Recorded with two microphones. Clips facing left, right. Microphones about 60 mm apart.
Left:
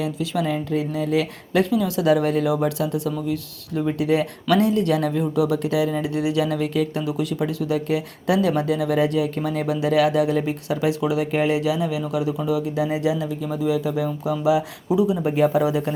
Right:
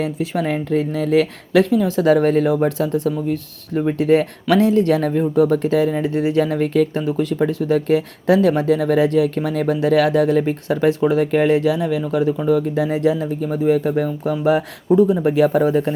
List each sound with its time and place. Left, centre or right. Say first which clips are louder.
0.0 s speech: right 3 dB; right